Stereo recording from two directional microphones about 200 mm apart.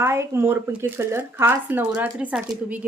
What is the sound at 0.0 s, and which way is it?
Speech, 15° right (ahead or behind).